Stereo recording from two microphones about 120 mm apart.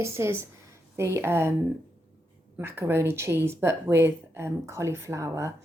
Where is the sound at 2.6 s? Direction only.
15° right (ahead or behind).